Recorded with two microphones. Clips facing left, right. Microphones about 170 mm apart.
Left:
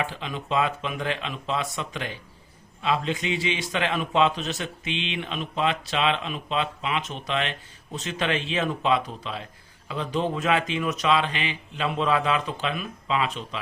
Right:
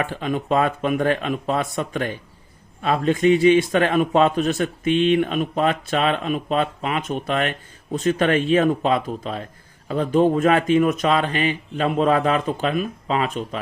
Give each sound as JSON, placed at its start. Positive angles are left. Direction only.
{"t": 0.0, "sound": "a man's voice", "side_deg": -50}